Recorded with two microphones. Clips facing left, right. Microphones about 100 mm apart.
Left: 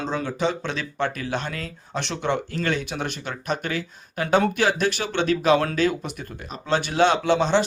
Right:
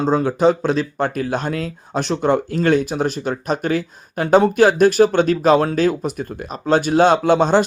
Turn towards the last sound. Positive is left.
turn(degrees=-45)  # may be behind; listen again after turning